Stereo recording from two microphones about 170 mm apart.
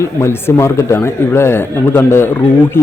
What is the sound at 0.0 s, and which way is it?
A man's voice, 15° left (ahead or behind).